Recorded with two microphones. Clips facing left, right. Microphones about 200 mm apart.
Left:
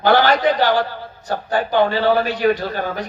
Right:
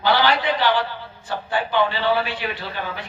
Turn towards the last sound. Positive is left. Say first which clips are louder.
# left 7 dB
turn(degrees=45)  # may be behind; listen again after turning